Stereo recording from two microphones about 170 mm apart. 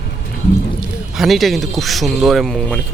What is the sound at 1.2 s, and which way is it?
Speech, centre (ahead or behind).